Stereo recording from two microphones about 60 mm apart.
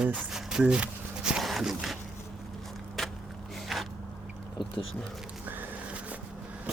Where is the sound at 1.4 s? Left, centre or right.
Centre.